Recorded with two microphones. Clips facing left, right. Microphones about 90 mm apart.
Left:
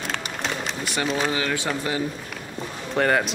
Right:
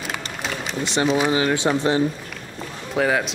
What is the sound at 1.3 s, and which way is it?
Speech, 25° right (ahead or behind).